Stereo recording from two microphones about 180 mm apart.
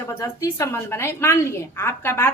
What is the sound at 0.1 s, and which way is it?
A woman's voice, 15° left (ahead or behind).